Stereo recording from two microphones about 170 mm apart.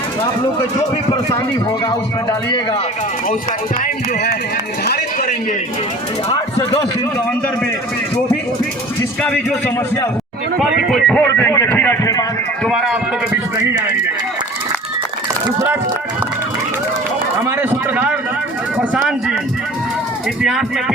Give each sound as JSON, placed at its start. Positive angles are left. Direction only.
{"t": 3.8, "sound": "music", "side_deg": 70}
{"t": 9.2, "sound": "a man's voice", "side_deg": 5}
{"t": 11.2, "sound": "a man's voice", "side_deg": 10}
{"t": 12.6, "sound": "speech", "side_deg": 0}
{"t": 13.3, "sound": "speech", "side_deg": -15}
{"t": 17.4, "sound": "a sound", "side_deg": -10}
{"t": 18.8, "sound": "speech", "side_deg": -5}
{"t": 20.4, "sound": "speech", "side_deg": -5}